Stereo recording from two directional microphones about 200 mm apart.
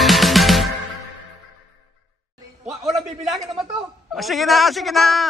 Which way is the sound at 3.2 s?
Centre (ahead or behind).